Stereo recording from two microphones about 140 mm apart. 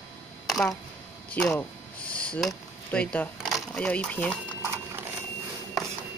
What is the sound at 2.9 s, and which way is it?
Speech, 10° left (ahead or behind).